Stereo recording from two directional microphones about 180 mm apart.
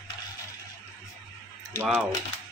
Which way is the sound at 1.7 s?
5° right (ahead or behind).